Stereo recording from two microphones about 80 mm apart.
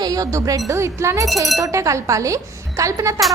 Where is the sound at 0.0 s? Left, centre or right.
Right.